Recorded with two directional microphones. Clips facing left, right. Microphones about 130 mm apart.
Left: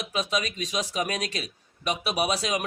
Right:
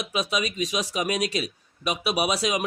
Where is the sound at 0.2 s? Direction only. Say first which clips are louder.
Right 2 dB; 10° right (ahead or behind).